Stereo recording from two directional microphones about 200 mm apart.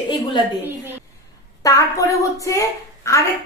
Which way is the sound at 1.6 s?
15° left (ahead or behind).